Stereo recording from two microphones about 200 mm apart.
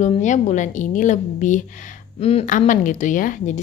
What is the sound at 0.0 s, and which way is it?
Speech, 35° left (ahead or behind).